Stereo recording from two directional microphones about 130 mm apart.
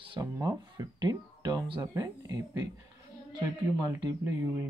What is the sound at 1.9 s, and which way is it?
Speech, 25° right (ahead or behind).